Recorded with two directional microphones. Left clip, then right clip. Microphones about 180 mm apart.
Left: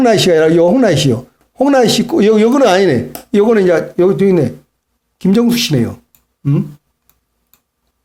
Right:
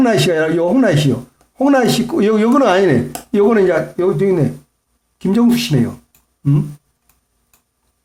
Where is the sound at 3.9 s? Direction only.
40° left (ahead or behind).